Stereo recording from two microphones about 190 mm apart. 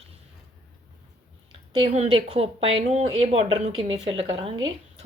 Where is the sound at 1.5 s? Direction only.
25° right (ahead or behind).